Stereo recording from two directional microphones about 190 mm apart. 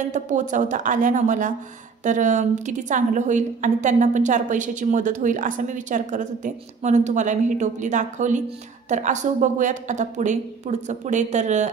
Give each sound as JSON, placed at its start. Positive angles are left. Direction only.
{"t": 0.0, "sound": "a woman's voice", "side_deg": -40}